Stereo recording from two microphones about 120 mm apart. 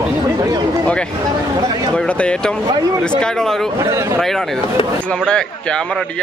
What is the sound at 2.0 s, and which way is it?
A man's voice, 10° left (ahead or behind).